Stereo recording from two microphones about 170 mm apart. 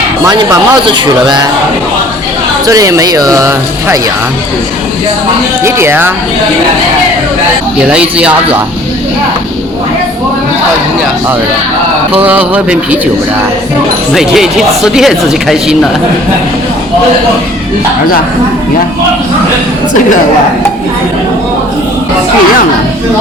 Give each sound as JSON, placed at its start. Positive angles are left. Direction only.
{"t": 0.3, "sound": "speech", "side_deg": -25}
{"t": 2.6, "sound": "speech", "side_deg": -20}
{"t": 5.6, "sound": "speech", "side_deg": -15}
{"t": 7.9, "sound": "speech", "side_deg": -5}
{"t": 12.2, "sound": "speech", "side_deg": -10}
{"t": 14.1, "sound": "speech", "side_deg": 0}